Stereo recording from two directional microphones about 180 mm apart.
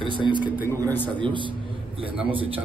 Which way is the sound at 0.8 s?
10° left (ahead or behind).